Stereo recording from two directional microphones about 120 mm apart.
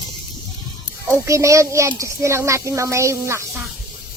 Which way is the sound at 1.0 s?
25° right (ahead or behind).